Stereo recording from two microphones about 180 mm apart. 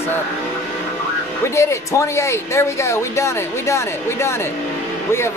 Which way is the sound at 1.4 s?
15° left (ahead or behind).